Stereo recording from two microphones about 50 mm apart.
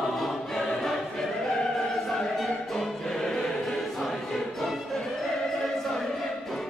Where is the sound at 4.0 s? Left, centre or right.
Centre.